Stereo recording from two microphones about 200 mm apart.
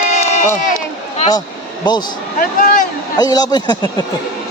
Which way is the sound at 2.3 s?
40° left (ahead or behind).